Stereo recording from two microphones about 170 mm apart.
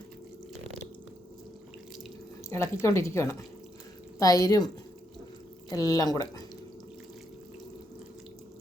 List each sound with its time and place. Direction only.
2.5 s speech: 15° left (ahead or behind)
5.7 s speech: 20° left (ahead or behind)